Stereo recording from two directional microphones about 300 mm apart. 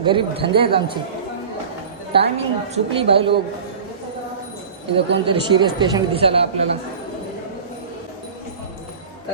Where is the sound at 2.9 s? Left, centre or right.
Centre.